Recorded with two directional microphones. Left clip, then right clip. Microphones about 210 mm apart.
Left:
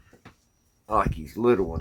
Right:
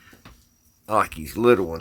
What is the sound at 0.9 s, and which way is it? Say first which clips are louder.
Speech: right 3 dB; 50° right (ahead or behind).